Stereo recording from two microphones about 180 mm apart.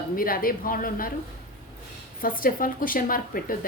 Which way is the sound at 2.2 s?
50° left (ahead or behind).